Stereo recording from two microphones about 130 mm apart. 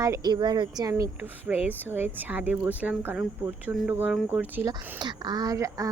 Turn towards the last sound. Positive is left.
turn(degrees=-25)  # may be behind; listen again after turning